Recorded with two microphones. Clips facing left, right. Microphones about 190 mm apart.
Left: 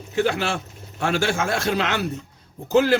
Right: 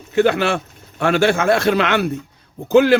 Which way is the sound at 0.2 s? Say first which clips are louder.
Right 6 dB; 65° right (ahead or behind).